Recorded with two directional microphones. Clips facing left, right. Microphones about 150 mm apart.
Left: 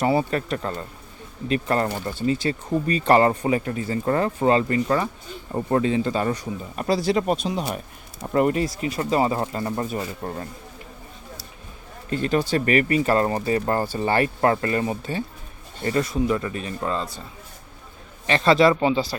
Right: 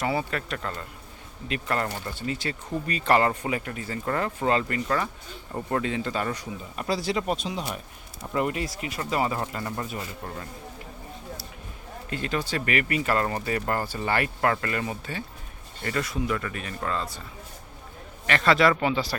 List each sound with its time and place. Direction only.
0.0 s speech: 35° left (ahead or behind)
6.7 s speech: 45° left (ahead or behind)
12.1 s speech: 30° left (ahead or behind)
18.3 s speech: 25° left (ahead or behind)